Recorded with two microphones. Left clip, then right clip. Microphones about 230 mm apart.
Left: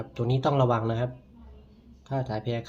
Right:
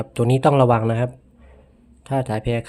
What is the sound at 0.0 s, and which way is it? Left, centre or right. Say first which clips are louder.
Speech: right 10 dB; right.